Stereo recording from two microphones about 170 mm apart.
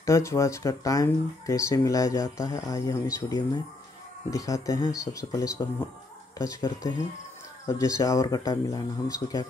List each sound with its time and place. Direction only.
0.0 s speech: 15° left (ahead or behind)